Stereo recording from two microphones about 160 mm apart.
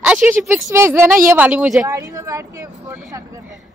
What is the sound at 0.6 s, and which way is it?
Speech, 15° right (ahead or behind).